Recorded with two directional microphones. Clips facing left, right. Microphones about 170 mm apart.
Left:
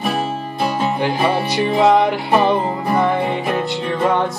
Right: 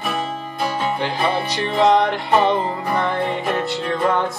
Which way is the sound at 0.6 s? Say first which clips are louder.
Left 3 dB; 10° left (ahead or behind).